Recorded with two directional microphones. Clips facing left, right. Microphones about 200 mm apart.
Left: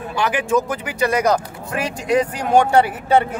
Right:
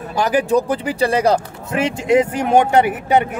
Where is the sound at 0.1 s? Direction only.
40° right (ahead or behind).